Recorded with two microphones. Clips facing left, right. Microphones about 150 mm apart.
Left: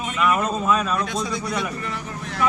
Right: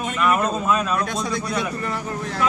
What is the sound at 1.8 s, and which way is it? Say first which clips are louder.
Speech: right 4 dB; 40° right (ahead or behind).